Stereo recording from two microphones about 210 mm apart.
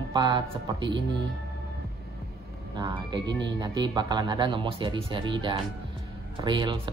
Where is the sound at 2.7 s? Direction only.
20° right (ahead or behind).